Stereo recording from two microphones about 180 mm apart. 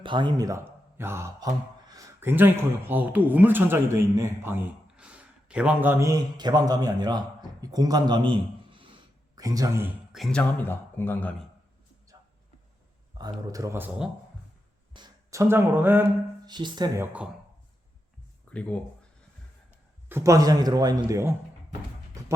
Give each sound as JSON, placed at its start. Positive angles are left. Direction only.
{"t": 0.0, "sound": "speech", "side_deg": -25}
{"t": 10.1, "sound": "speech", "side_deg": 0}
{"t": 10.6, "sound": "speech", "side_deg": 10}
{"t": 13.1, "sound": "speech", "side_deg": -20}
{"t": 16.5, "sound": "speech", "side_deg": -25}
{"t": 17.0, "sound": "speech", "side_deg": -5}
{"t": 18.5, "sound": "speech", "side_deg": 5}
{"t": 20.1, "sound": "speech", "side_deg": -15}